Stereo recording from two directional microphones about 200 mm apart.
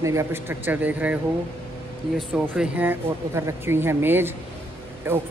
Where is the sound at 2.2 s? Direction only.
5° right (ahead or behind).